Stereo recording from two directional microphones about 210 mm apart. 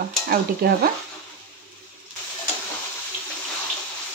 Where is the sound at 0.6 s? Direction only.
45° right (ahead or behind).